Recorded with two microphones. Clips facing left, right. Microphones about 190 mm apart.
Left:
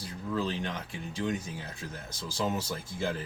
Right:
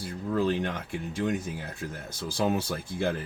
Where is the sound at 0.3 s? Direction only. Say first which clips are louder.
Right 5 dB; 50° right (ahead or behind).